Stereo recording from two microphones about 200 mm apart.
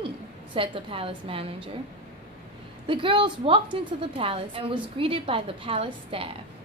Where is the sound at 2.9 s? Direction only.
25° right (ahead or behind).